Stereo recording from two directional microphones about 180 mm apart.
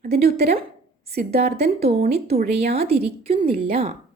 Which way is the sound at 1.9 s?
35° right (ahead or behind).